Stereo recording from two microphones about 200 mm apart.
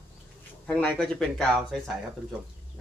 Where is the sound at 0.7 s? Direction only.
5° left (ahead or behind).